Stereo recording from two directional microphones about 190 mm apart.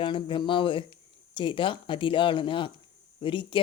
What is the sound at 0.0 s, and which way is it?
Speech, 25° left (ahead or behind).